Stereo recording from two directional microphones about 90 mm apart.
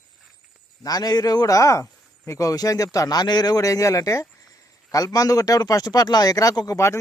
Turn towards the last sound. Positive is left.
turn(degrees=35)  # may be behind; listen again after turning